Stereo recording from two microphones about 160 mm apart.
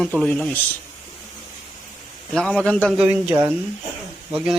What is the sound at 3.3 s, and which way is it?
Speech, 30° right (ahead or behind).